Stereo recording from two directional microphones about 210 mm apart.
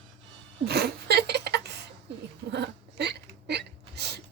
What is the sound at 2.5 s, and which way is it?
Hiccup, 55° right (ahead or behind).